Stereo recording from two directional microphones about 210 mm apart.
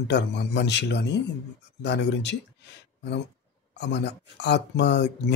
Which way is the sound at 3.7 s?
55° left (ahead or behind).